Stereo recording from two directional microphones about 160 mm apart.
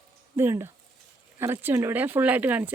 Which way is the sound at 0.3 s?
15° right (ahead or behind).